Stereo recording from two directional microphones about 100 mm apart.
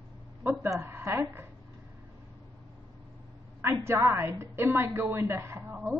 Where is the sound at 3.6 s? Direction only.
25° right (ahead or behind).